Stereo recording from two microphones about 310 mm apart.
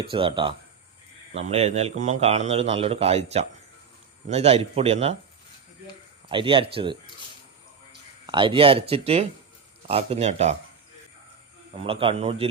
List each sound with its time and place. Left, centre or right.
0.0 s a man's voice: centre
6.2 s speech: centre
8.3 s a man's voice: centre
11.8 s speech: centre